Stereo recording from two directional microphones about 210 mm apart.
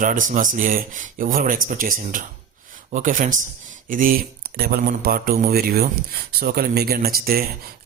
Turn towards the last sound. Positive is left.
turn(degrees=-45)  # may be behind; listen again after turning